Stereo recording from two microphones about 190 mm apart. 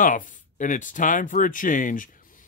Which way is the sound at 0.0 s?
45° left (ahead or behind).